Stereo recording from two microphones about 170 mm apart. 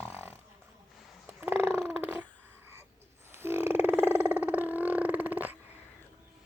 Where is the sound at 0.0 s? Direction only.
15° right (ahead or behind).